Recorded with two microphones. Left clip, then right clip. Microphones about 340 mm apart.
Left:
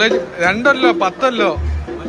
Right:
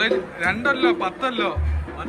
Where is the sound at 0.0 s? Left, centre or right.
Centre.